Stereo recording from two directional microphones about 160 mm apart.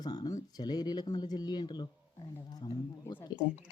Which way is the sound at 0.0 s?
25° left (ahead or behind).